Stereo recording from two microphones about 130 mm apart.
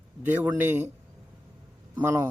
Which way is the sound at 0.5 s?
15° right (ahead or behind).